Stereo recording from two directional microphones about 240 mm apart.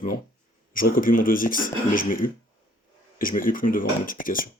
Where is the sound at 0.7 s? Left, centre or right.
Left.